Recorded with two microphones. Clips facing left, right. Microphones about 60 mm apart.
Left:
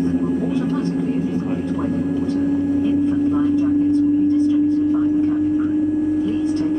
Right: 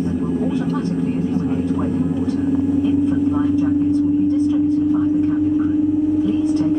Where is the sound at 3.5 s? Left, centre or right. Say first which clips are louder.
Even; left.